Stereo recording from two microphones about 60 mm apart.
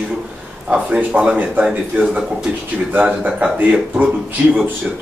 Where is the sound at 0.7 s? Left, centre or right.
Right.